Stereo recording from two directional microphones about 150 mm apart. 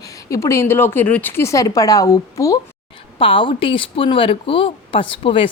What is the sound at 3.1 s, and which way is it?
A woman's voice, 35° left (ahead or behind).